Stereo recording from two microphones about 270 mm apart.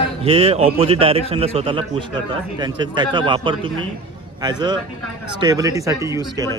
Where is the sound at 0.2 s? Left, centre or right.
Right.